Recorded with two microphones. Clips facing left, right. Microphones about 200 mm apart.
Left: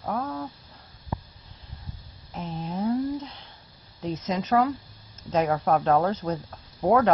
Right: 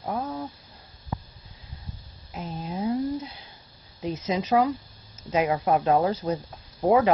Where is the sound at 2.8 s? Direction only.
15° right (ahead or behind).